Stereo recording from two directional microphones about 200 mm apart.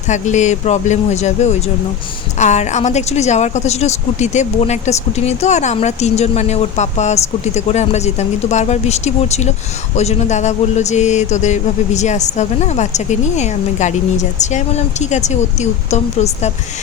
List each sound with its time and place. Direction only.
0.1 s a woman's voice: 35° left (ahead or behind)